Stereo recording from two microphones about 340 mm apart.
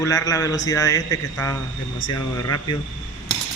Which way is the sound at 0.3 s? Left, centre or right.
Centre.